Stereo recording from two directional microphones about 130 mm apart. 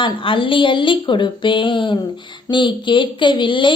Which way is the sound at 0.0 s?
40° left (ahead or behind).